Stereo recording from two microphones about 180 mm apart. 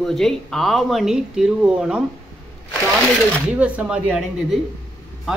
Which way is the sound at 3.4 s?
5° right (ahead or behind).